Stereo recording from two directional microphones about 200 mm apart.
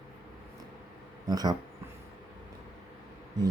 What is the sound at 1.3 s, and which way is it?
Speech, 20° right (ahead or behind).